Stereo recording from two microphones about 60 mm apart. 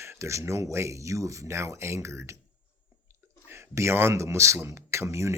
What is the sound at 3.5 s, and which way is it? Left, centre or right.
Speech, right.